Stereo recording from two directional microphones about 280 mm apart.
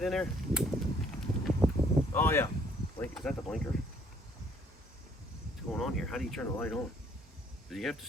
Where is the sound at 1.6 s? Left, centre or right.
Centre.